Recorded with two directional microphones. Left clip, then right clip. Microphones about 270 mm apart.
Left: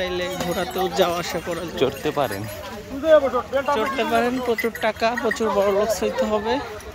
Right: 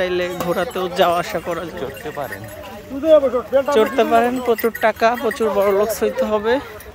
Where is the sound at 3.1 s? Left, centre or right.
Right.